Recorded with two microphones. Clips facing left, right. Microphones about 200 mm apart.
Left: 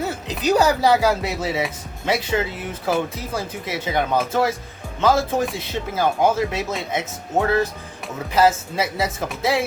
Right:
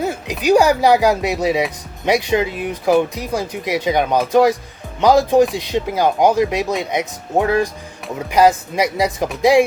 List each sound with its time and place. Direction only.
0.0 s speech: 15° right (ahead or behind)